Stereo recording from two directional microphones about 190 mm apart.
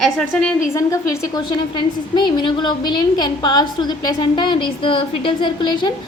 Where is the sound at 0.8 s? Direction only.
15° left (ahead or behind).